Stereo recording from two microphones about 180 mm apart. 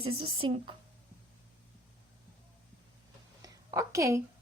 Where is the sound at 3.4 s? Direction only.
20° right (ahead or behind).